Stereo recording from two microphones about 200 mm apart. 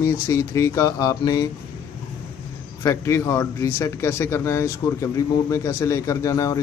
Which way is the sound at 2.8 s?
15° left (ahead or behind).